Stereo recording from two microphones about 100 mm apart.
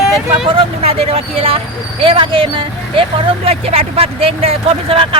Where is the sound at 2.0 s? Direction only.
65° right (ahead or behind).